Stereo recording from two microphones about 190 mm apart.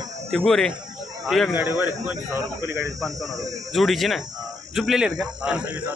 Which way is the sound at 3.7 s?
Centre (ahead or behind).